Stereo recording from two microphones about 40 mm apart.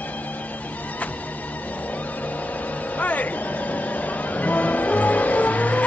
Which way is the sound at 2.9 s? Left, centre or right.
Left.